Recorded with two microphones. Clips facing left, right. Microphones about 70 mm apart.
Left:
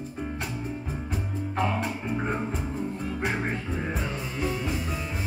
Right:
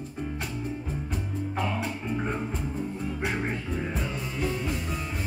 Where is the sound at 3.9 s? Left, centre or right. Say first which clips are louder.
Left 1 dB; centre.